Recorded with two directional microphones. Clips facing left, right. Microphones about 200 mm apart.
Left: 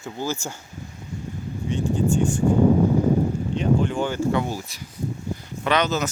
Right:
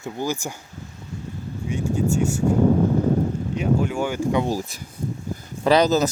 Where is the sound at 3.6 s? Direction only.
10° right (ahead or behind).